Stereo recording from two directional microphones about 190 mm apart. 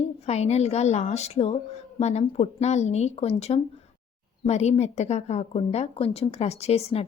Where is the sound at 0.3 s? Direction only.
35° left (ahead or behind).